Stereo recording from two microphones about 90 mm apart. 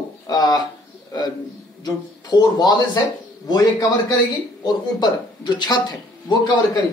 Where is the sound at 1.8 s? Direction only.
50° left (ahead or behind).